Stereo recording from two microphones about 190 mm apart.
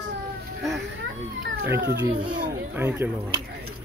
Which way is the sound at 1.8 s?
65° right (ahead or behind).